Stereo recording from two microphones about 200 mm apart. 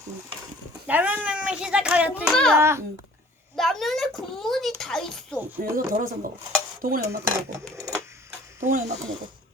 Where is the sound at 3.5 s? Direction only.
Centre (ahead or behind).